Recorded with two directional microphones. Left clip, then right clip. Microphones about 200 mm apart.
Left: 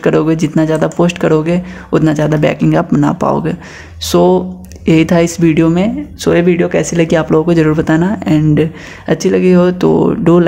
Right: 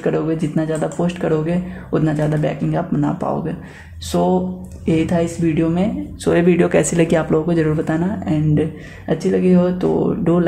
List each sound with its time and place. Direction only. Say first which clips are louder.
0.0 s speech: left 8 dB; 35° left (ahead or behind)